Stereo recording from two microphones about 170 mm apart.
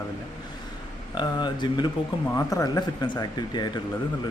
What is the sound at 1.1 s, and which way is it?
Speech, 25° left (ahead or behind).